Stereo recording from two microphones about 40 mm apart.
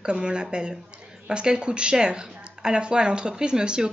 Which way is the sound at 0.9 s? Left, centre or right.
Right.